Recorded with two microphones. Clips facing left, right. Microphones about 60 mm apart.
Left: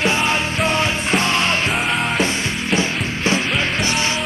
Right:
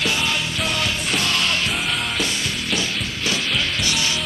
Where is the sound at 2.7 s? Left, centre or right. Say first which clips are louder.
Left 7 dB; left.